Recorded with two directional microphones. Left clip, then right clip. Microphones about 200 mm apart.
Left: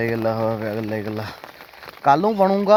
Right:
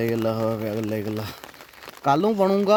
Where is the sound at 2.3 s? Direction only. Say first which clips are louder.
Left 3 dB; 15° right (ahead or behind).